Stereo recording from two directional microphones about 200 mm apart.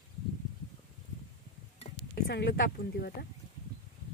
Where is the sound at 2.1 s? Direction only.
55° left (ahead or behind).